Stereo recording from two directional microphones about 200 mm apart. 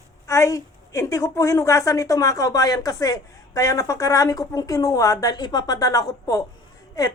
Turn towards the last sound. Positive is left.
turn(degrees=15)  # may be behind; listen again after turning